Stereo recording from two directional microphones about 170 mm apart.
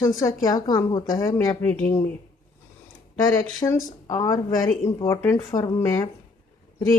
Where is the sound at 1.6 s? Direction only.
10° left (ahead or behind).